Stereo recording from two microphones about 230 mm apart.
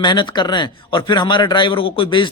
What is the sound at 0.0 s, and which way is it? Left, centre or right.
A man's voice, centre.